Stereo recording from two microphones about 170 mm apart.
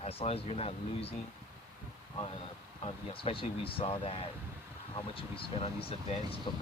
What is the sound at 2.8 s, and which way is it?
Speech, 30° left (ahead or behind).